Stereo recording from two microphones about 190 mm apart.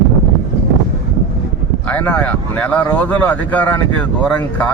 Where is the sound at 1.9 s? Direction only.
10° left (ahead or behind).